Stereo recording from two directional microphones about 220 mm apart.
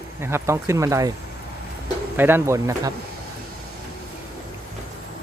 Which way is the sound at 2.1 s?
10° right (ahead or behind).